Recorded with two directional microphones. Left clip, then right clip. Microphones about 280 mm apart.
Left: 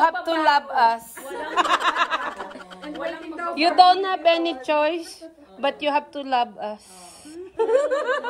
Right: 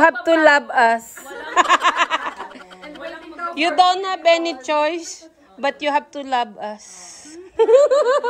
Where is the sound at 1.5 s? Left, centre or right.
Centre.